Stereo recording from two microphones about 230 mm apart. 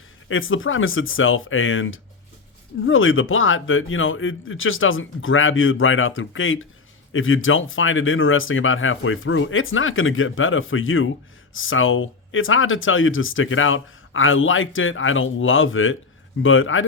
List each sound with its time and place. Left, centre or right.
0.3 s speech: left